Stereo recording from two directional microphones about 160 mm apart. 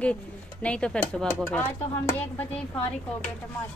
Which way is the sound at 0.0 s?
5° left (ahead or behind).